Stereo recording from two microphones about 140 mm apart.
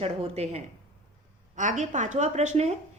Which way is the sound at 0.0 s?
50° right (ahead or behind).